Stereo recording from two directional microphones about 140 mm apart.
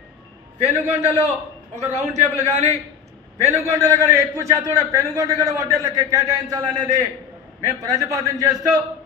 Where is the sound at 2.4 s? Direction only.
50° right (ahead or behind).